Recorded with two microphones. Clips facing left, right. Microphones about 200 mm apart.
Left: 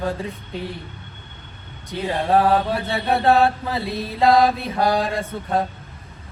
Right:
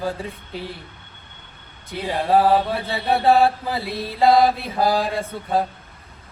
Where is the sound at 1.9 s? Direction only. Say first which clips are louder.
Even; centre (ahead or behind).